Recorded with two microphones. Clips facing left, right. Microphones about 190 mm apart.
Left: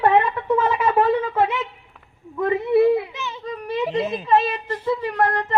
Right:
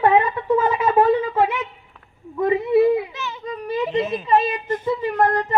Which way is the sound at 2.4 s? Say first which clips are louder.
Right 1 dB; 15° right (ahead or behind).